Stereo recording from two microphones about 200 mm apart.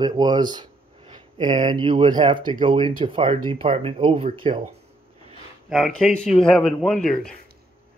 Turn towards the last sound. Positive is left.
turn(degrees=0)  # may be behind; listen again after turning